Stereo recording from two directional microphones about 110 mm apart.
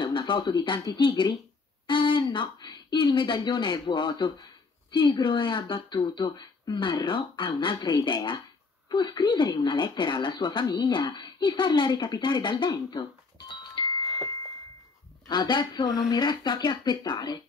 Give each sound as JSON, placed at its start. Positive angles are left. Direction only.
{"t": 0.0, "sound": "speech", "side_deg": 45}
{"t": 15.2, "sound": "speech", "side_deg": 40}